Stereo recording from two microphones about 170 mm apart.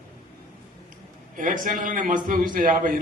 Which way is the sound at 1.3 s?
50° right (ahead or behind).